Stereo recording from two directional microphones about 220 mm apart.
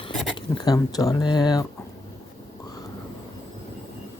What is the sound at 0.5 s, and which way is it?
Speech, 20° left (ahead or behind).